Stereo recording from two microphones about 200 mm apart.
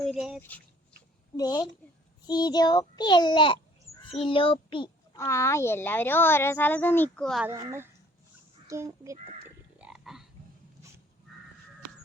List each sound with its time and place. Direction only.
0.0 s speech: centre (ahead or behind)
1.4 s child singing: 20° left (ahead or behind)
5.1 s speech: 15° left (ahead or behind)
7.4 s a child's voice: 15° right (ahead or behind)
9.7 s frog: 5° right (ahead or behind)